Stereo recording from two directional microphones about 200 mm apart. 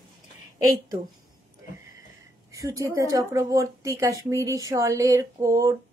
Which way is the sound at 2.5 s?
15° right (ahead or behind).